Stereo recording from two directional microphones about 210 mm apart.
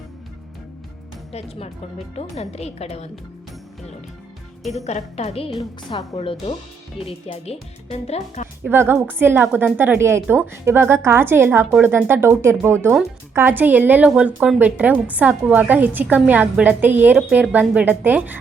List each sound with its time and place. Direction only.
1.3 s speech: 30° left (ahead or behind)
4.9 s speech: 30° left (ahead or behind)
8.6 s a woman's voice: 10° right (ahead or behind)